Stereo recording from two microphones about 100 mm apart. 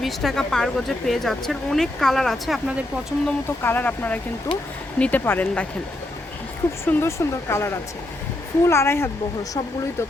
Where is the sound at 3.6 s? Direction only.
20° left (ahead or behind).